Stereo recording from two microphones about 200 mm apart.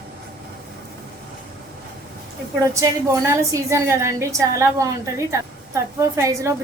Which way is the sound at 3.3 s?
15° right (ahead or behind).